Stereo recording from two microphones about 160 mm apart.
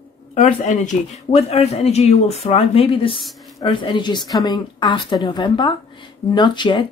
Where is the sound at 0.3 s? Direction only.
45° left (ahead or behind).